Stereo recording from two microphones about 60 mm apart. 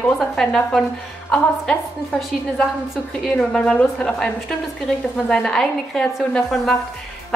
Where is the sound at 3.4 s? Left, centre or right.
Centre.